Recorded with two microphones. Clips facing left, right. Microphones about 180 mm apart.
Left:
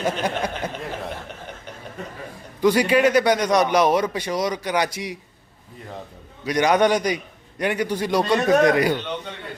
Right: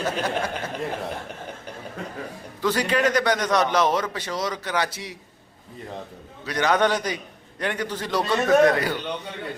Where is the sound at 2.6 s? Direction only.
10° left (ahead or behind).